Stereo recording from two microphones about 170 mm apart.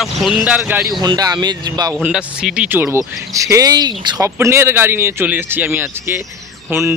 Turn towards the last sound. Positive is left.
turn(degrees=-15)  # may be behind; listen again after turning